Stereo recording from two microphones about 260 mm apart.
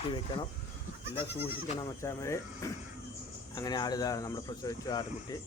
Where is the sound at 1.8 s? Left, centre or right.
Centre.